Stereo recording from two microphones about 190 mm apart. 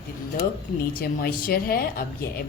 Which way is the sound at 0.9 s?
50° left (ahead or behind).